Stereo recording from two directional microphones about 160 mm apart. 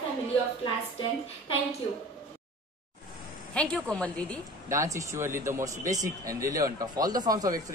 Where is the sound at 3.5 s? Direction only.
5° left (ahead or behind).